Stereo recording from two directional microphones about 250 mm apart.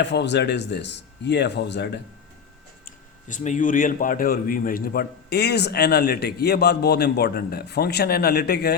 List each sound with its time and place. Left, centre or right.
0.0 s speech: left
2.8 s speech: left